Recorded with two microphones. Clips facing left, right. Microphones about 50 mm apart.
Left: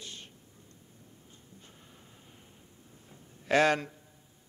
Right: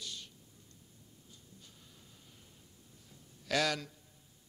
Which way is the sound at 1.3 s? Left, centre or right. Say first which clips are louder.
Left 4 dB; left.